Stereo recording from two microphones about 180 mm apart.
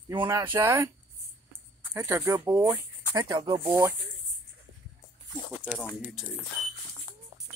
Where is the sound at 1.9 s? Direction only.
15° right (ahead or behind).